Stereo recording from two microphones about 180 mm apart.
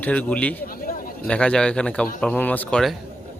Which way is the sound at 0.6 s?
50° left (ahead or behind).